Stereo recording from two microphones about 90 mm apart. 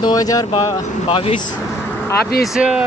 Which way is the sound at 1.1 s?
90° left.